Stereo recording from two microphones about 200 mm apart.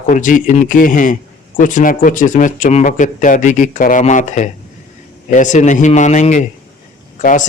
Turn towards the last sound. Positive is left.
turn(degrees=40)  # may be behind; listen again after turning